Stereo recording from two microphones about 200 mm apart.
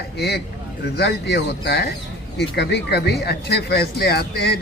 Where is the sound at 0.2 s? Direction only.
55° left (ahead or behind).